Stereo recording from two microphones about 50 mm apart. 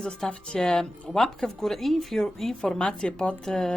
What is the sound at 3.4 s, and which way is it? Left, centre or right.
Speech, centre.